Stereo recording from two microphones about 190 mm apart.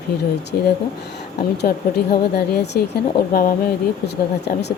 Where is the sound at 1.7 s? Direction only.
50° left (ahead or behind).